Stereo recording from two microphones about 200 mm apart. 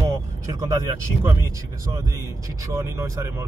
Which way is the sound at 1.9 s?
15° right (ahead or behind).